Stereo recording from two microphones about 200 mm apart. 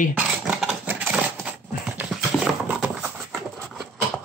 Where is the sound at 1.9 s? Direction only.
Centre (ahead or behind).